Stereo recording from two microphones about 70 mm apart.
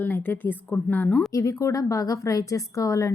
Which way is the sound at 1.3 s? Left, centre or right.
Left.